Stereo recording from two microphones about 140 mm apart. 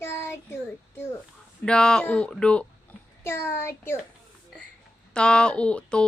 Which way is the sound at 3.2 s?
20° left (ahead or behind).